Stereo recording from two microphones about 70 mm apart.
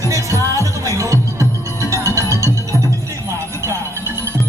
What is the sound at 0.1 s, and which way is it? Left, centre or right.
Music, right.